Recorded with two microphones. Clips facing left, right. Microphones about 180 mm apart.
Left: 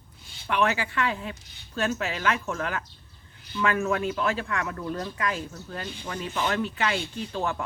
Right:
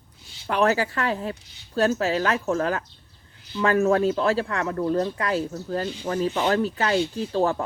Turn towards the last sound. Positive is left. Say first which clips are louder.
# right 7 dB
turn(degrees=-35)  # may be behind; listen again after turning